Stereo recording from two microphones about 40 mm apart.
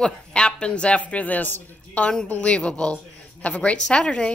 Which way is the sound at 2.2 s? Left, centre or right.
Left.